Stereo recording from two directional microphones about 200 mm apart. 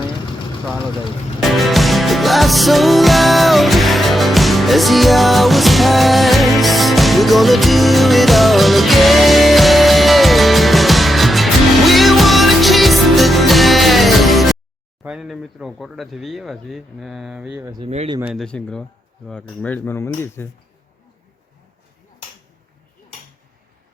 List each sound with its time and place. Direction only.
1.4 s music: centre (ahead or behind)
15.0 s speech: 5° right (ahead or behind)
17.7 s speech: 20° right (ahead or behind)
18.2 s speech: centre (ahead or behind)